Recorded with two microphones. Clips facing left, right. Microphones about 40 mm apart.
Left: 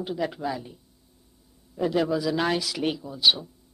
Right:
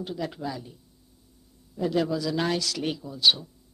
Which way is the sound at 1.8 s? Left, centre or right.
Centre.